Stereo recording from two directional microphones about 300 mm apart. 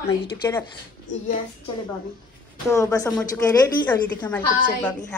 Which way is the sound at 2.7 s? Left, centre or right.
Centre.